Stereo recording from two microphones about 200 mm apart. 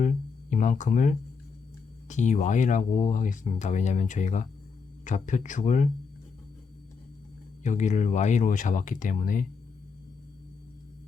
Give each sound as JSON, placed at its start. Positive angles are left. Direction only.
{"t": 0.0, "sound": "speech", "side_deg": 40}
{"t": 7.6, "sound": "speech", "side_deg": 35}